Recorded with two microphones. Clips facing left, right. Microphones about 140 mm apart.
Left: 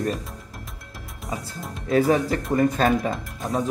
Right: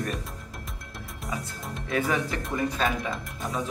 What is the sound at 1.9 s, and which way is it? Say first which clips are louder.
Speech: left 8 dB; 35° left (ahead or behind).